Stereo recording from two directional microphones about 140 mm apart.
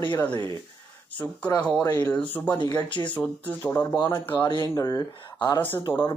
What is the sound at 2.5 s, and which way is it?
Speech, 30° left (ahead or behind).